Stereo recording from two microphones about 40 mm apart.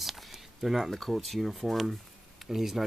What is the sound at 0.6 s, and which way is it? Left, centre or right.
Speech, centre.